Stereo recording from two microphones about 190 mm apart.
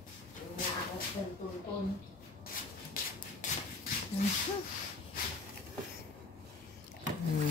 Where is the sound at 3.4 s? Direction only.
40° left (ahead or behind).